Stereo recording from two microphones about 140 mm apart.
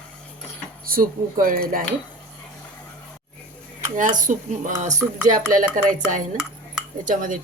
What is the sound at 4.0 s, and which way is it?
Speech, 70° right (ahead or behind).